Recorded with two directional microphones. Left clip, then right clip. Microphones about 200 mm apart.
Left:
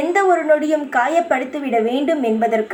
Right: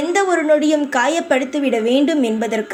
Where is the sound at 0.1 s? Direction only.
40° right (ahead or behind).